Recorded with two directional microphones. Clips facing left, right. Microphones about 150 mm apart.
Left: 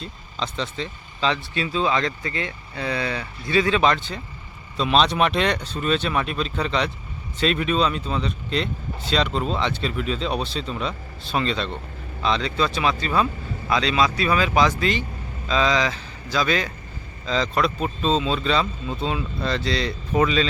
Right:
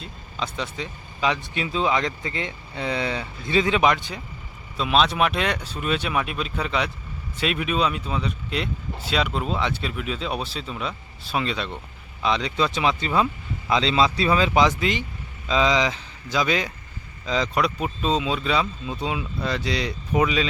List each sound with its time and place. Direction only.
0.0 s speech: 10° right (ahead or behind)